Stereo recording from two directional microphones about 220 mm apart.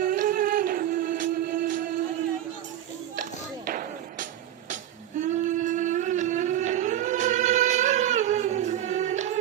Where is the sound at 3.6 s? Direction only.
40° right (ahead or behind).